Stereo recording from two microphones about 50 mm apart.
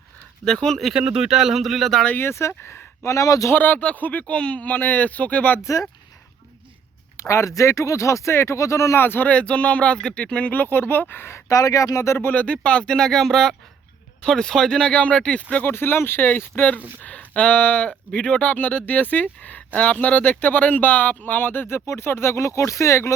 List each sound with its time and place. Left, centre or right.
0.4 s speech: centre
0.9 s speech: centre
2.5 s speech: left
3.0 s speech: left
3.5 s speech: left
7.2 s speech: left
9.0 s speech: left
9.3 s speech: left
10.4 s speech: left
11.3 s speech: left
12.3 s speech: left
15.6 s speech: left
16.6 s speech: left
21.8 s speech: left